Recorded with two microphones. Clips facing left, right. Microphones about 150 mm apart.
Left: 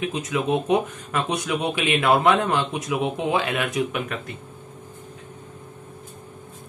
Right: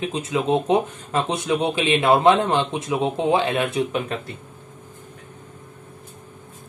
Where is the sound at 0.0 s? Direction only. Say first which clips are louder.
Right 1 dB; 30° right (ahead or behind).